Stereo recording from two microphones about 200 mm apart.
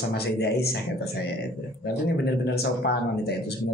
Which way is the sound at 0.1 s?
55° left (ahead or behind).